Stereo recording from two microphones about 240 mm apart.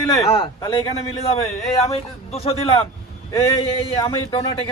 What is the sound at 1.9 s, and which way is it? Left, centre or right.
Speech, left.